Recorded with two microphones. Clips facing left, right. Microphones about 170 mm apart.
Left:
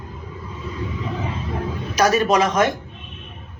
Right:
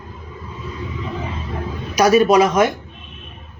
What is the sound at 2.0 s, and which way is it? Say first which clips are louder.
Speech: right 5 dB; 10° right (ahead or behind).